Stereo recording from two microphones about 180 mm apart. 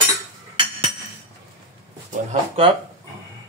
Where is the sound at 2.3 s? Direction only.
30° right (ahead or behind).